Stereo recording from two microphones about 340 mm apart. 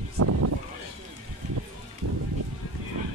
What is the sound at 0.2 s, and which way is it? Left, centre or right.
Speech, right.